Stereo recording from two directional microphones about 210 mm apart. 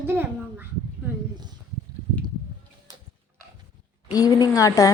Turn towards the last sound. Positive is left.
turn(degrees=15)  # may be behind; listen again after turning